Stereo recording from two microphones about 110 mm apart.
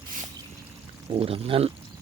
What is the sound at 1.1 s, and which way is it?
Speech, 60° right (ahead or behind).